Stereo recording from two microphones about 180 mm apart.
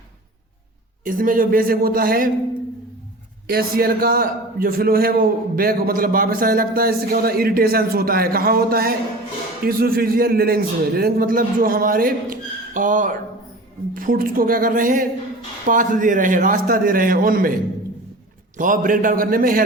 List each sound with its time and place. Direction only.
1.0 s a man's voice: 50° right (ahead or behind)
3.5 s a man's voice: 55° right (ahead or behind)
18.5 s a man's voice: 50° right (ahead or behind)